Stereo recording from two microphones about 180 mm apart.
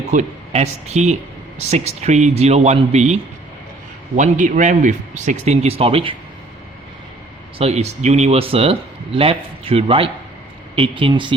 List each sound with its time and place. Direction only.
0.1 s speech: 40° right (ahead or behind)
4.2 s speech: 45° right (ahead or behind)
7.6 s speech: 35° right (ahead or behind)